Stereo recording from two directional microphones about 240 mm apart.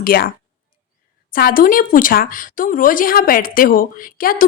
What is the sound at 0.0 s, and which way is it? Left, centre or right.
Speech, left.